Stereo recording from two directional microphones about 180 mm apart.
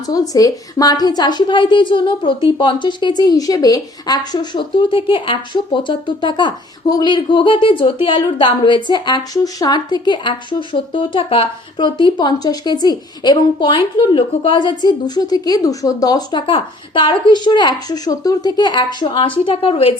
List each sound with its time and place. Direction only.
0.0 s speech: 20° left (ahead or behind)